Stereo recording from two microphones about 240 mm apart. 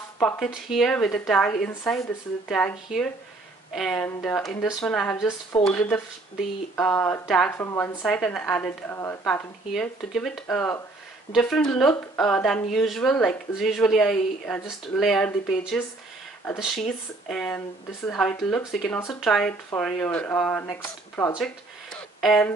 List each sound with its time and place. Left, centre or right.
0.2 s speech: centre
3.7 s speech: centre
5.1 s a woman's voice: centre
5.6 s a woman's voice: centre
21.9 s a sound: centre